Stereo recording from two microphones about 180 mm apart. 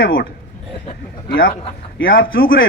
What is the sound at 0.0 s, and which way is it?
Speech, 55° left (ahead or behind).